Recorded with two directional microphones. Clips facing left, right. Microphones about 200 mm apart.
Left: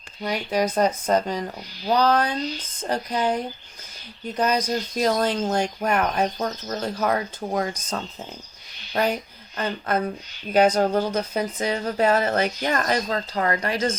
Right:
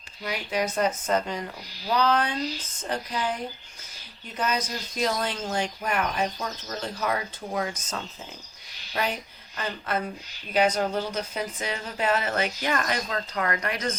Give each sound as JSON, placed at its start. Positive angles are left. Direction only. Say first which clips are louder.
{"t": 0.2, "sound": "speech", "louder": "left 5 dB", "side_deg": 40}
{"t": 4.4, "sound": "speech", "louder": "left 6 dB", "side_deg": 40}
{"t": 9.6, "sound": "speech", "louder": "left 5 dB", "side_deg": 40}